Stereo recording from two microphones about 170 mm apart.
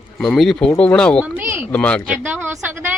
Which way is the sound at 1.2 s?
10° right (ahead or behind).